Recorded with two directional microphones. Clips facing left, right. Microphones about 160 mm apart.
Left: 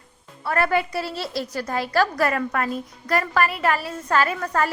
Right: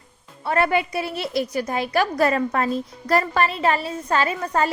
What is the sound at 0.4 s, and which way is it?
A woman's voice, 20° right (ahead or behind).